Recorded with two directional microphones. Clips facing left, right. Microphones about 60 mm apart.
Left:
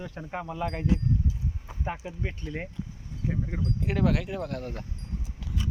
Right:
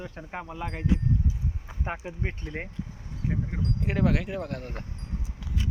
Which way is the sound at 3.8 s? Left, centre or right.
Right.